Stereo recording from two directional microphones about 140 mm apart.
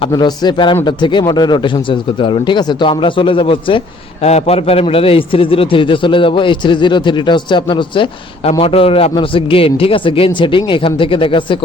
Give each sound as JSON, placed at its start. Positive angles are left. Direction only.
{"t": 0.0, "sound": "a man's voice", "side_deg": 30}
{"t": 4.2, "sound": "a man's voice", "side_deg": 50}
{"t": 8.4, "sound": "a man's voice", "side_deg": 45}